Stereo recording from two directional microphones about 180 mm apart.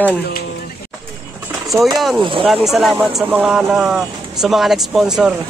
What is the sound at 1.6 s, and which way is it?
Speech, centre (ahead or behind).